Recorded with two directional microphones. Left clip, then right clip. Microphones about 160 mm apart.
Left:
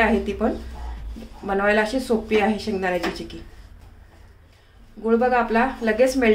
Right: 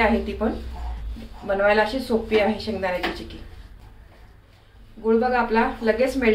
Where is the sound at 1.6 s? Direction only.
90° left.